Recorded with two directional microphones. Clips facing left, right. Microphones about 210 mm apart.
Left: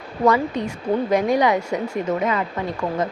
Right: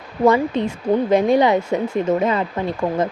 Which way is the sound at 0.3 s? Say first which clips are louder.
Right 3 dB; 25° right (ahead or behind).